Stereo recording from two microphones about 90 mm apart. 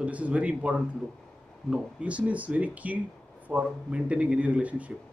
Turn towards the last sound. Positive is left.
turn(degrees=-15)  # may be behind; listen again after turning